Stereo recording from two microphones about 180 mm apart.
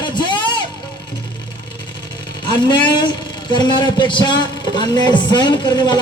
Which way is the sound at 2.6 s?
25° left (ahead or behind).